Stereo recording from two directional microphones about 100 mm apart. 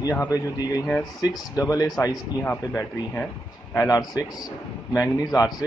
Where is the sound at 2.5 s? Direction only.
25° left (ahead or behind).